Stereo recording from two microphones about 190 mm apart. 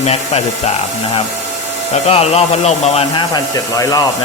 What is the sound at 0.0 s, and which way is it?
Speech, 35° left (ahead or behind).